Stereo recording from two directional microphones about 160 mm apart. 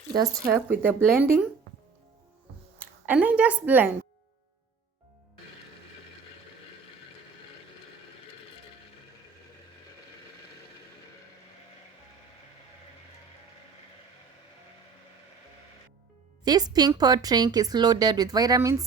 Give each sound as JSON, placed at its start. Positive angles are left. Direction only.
{"t": 0.7, "sound": "speech", "side_deg": -15}
{"t": 2.7, "sound": "speech", "side_deg": -10}
{"t": 16.4, "sound": "speech", "side_deg": -25}